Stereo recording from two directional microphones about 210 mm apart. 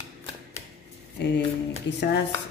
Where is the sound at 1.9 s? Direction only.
60° left (ahead or behind).